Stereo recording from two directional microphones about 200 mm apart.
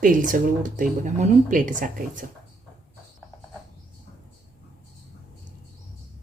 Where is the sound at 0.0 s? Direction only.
45° right (ahead or behind).